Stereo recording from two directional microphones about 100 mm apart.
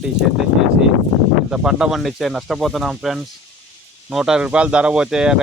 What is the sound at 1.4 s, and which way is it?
Speech, 5° right (ahead or behind).